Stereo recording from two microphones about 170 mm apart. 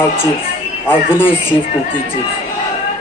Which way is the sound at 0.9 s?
10° left (ahead or behind).